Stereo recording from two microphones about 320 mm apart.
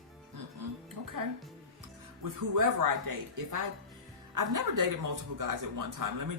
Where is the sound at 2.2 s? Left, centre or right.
Right.